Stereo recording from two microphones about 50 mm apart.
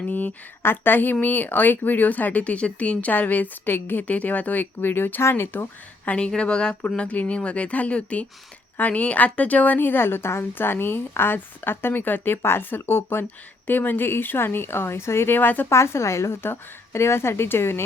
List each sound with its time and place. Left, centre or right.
0.1 s a sound: left
0.6 s a woman's voice: left
6.1 s a woman's voice: left
15.4 s a woman's voice: left
15.7 s a woman's voice: left